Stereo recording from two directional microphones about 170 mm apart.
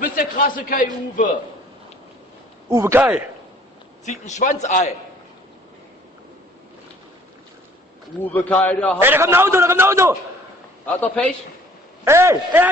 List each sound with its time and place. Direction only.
0.0 s a man's voice: 55° left (ahead or behind)
2.7 s a man's voice: 15° right (ahead or behind)
4.0 s a man's voice: 45° left (ahead or behind)
8.2 s a man's voice: 10° left (ahead or behind)
9.0 s a man's voice: 15° right (ahead or behind)
11.0 s a man's voice: 10° left (ahead or behind)
12.0 s a man's voice: 15° right (ahead or behind)